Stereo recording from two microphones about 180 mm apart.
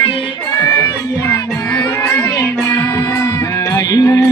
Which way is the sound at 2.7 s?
10° left (ahead or behind).